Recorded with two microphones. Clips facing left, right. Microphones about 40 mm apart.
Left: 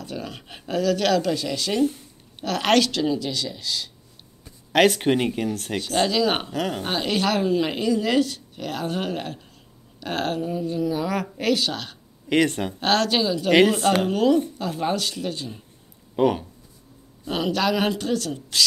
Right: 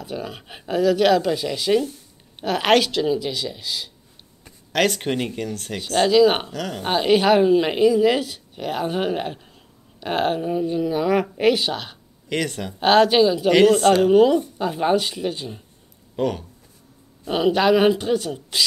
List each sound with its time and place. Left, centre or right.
0.0 s a woman's voice: centre
4.7 s speech: centre
5.8 s a woman's voice: centre
6.5 s speech: centre
6.8 s a woman's voice: centre
12.3 s speech: centre
12.8 s a woman's voice: centre
13.5 s speech: centre
14.0 s a woman's voice: centre
16.2 s speech: centre
17.3 s a woman's voice: centre